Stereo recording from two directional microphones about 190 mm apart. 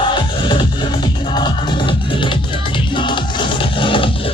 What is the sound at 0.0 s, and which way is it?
Music, 25° left (ahead or behind).